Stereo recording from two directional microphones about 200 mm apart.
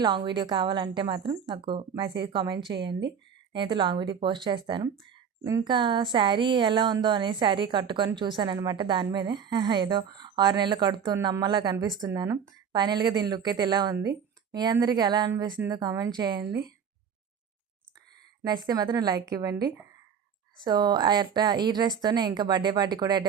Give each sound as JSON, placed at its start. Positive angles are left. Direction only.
{"t": 0.0, "sound": "speech", "side_deg": -20}
{"t": 18.4, "sound": "speech", "side_deg": -20}
{"t": 20.7, "sound": "speech", "side_deg": -20}